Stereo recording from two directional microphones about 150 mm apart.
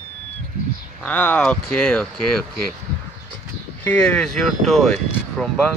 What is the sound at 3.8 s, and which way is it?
Speech, 10° left (ahead or behind).